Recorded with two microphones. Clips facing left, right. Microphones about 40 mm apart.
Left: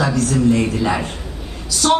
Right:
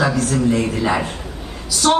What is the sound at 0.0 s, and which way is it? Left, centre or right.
Speech, centre.